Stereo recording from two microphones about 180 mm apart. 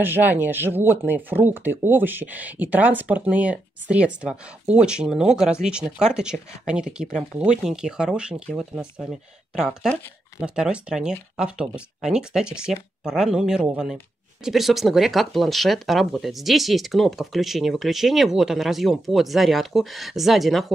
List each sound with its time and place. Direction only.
0.0 s speech: 10° right (ahead or behind)